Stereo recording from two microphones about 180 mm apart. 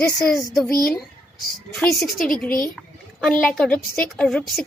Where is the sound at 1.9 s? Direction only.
Centre (ahead or behind).